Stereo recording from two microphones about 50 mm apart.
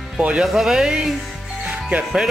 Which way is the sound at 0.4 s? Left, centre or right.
Centre.